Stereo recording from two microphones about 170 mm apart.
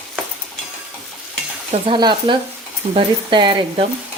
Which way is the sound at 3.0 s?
30° right (ahead or behind).